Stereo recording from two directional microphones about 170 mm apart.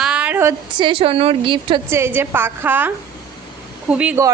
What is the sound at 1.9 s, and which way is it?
A woman's voice, 15° right (ahead or behind).